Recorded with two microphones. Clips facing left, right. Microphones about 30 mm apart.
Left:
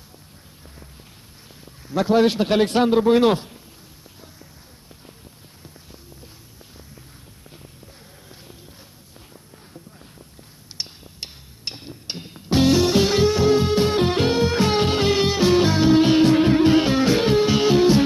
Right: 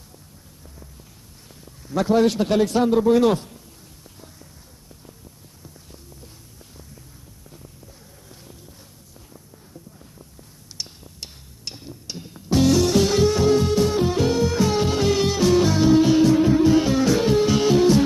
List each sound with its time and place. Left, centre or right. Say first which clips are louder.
1.9 s a man's voice: left 1 dB; left
2.6 s a man's voice: left 1 dB; left
10.8 s music: left 2 dB; left
13.9 s music: left 1 dB; left